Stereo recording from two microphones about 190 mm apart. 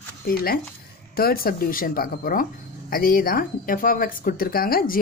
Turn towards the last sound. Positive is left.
turn(degrees=50)  # may be behind; listen again after turning